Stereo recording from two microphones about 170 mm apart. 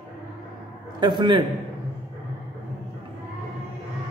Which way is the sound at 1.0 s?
25° right (ahead or behind).